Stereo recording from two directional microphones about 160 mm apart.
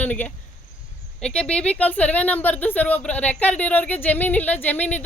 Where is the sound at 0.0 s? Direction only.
10° left (ahead or behind).